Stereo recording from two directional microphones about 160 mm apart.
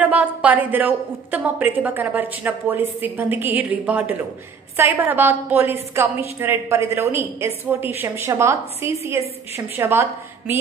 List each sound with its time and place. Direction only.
0.0 s a woman's voice: 10° right (ahead or behind)